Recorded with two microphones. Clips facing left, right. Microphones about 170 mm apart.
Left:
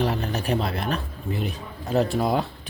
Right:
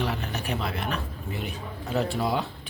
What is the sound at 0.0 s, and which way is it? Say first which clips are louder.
Speech: left 5 dB; 40° left (ahead or behind).